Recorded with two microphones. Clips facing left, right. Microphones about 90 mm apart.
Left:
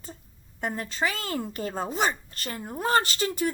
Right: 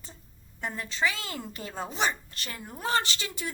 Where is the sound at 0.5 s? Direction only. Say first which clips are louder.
Left 3 dB; 45° left (ahead or behind).